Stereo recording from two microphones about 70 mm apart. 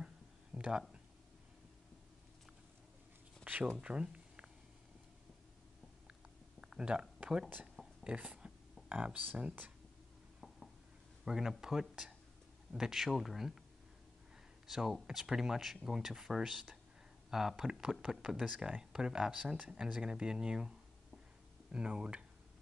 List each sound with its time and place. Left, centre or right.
0.6 s speech: centre
3.4 s speech: right
3.7 s a sound: centre
6.8 s speech: centre
8.0 s a sound: centre
8.8 s speech: right
11.2 s speech: centre
14.7 s speech: centre
21.7 s speech: centre